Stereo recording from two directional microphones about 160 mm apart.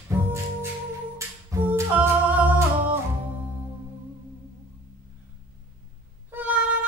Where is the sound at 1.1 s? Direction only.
15° right (ahead or behind).